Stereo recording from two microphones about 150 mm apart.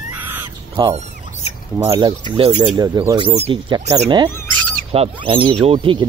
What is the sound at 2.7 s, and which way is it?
Speech, 25° right (ahead or behind).